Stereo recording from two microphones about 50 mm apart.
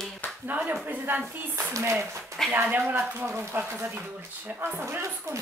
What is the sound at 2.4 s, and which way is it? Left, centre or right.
Speech, centre.